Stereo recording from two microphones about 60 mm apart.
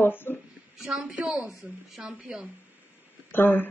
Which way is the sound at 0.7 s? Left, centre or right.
Centre.